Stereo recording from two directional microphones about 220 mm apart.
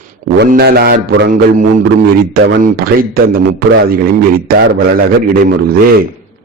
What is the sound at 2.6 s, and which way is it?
Mantra, 40° right (ahead or behind).